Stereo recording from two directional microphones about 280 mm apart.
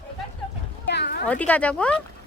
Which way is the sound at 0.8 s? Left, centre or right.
Left.